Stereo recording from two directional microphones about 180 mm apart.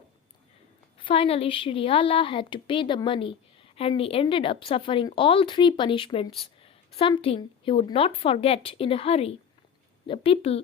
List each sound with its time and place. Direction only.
0.9 s a woman's voice: 30° left (ahead or behind)